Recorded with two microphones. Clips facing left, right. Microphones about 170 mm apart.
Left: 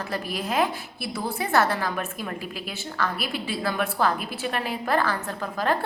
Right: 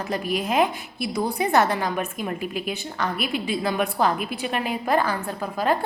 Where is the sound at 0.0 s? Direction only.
15° right (ahead or behind).